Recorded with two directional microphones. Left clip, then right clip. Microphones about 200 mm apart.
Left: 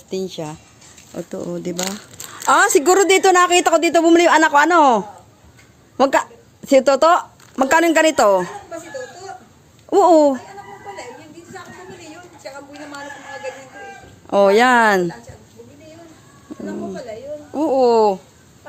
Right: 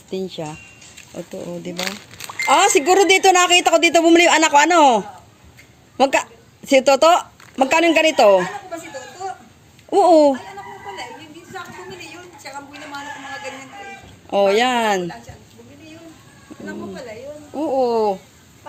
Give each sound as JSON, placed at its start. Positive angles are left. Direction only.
{"t": 0.1, "sound": "speech", "side_deg": 5}
{"t": 1.6, "sound": "speech", "side_deg": 30}
{"t": 3.1, "sound": "a man's voice", "side_deg": 15}
{"t": 7.8, "sound": "speech", "side_deg": 30}
{"t": 9.9, "sound": "a man's voice", "side_deg": 15}
{"t": 11.5, "sound": "a sound", "side_deg": -50}
{"t": 14.3, "sound": "speech", "side_deg": 25}
{"t": 17.5, "sound": "speech", "side_deg": 25}